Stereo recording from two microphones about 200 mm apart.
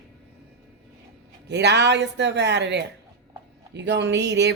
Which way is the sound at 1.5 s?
60° right (ahead or behind).